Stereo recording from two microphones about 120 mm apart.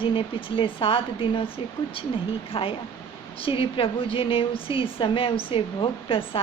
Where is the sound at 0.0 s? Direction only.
45° left (ahead or behind).